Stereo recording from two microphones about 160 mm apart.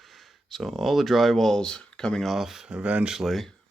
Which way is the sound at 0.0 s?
Centre (ahead or behind).